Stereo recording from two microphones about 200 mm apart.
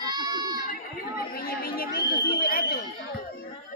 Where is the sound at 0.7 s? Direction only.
50° left (ahead or behind).